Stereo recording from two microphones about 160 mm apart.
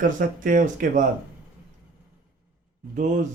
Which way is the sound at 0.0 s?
55° right (ahead or behind).